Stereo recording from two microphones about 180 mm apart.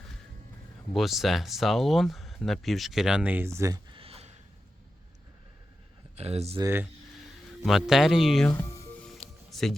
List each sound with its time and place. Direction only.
0.9 s speech: centre (ahead or behind); by 3.9 s 15° right (ahead or behind)
3.9 s a sound: 30° right (ahead or behind)
6.1 s speech: 35° right (ahead or behind)
6.6 s speech: 15° right (ahead or behind)
7.6 s speech: centre (ahead or behind)
8.7 s music: 15° left (ahead or behind)
9.0 s music: centre (ahead or behind)